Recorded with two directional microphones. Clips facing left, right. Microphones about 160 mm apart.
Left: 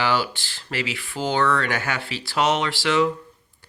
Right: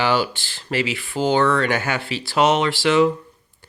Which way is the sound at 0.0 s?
20° right (ahead or behind).